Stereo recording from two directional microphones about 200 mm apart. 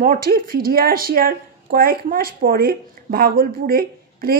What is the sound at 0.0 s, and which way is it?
A woman's voice, 45° right (ahead or behind).